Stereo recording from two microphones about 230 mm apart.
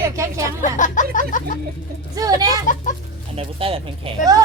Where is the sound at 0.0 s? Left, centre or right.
Centre.